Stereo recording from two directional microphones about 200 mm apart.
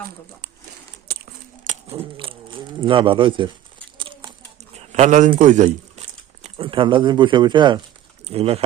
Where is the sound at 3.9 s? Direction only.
25° right (ahead or behind).